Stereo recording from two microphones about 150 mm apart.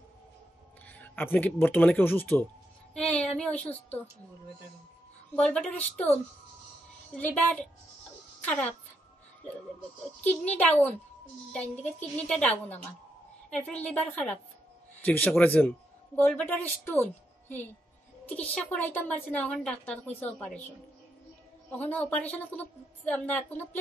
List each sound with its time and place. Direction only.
0.8 s speech: 10° left (ahead or behind)
2.9 s music: 5° left (ahead or behind)
5.3 s a woman's voice: 5° left (ahead or behind)
7.2 s a woman's voice: 10° left (ahead or behind)
10.6 s a woman's voice: 10° left (ahead or behind)
21.6 s a woman's voice: 10° left (ahead or behind)